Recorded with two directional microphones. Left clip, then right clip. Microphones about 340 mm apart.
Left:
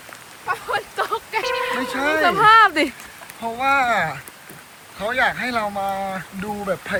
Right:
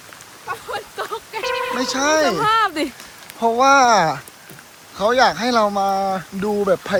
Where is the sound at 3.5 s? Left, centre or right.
Centre.